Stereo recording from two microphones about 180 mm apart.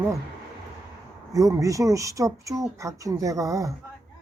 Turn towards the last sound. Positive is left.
turn(degrees=-20)  # may be behind; listen again after turning